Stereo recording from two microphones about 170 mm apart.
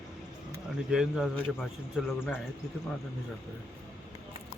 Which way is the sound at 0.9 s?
5° right (ahead or behind).